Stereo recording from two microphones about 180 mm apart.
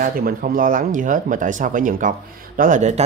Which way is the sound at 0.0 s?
50° right (ahead or behind).